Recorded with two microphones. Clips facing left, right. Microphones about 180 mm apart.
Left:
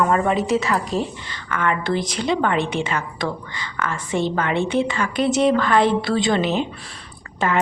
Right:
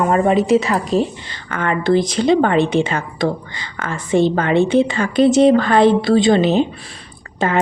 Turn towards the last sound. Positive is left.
turn(degrees=-30)  # may be behind; listen again after turning